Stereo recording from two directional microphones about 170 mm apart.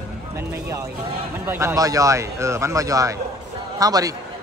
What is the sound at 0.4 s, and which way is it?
A man's voice, 15° right (ahead or behind).